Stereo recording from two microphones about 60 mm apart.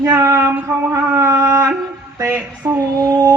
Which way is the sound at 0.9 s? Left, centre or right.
Right.